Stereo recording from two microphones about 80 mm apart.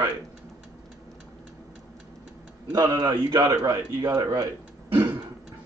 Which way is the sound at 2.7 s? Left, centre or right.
Right.